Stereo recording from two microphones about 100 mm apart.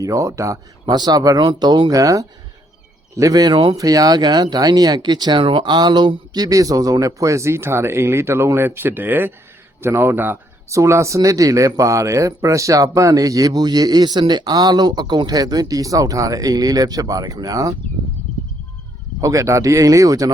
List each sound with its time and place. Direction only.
0.0 s speech: 30° right (ahead or behind)
0.9 s speech: 40° right (ahead or behind)
2.0 s a man's voice: 35° right (ahead or behind)
19.2 s speech: 30° right (ahead or behind)